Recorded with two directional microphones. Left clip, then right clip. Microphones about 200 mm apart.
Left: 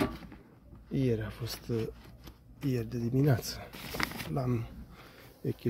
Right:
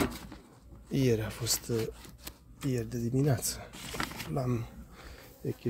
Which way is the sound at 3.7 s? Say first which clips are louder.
Left 6 dB; 35° left (ahead or behind).